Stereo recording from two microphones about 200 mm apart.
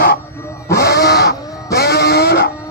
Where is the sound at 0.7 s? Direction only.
55° left (ahead or behind).